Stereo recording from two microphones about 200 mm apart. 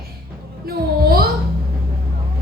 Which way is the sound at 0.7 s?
50° right (ahead or behind).